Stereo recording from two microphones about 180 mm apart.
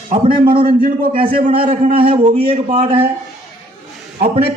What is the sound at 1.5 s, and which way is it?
A man's voice, 35° right (ahead or behind).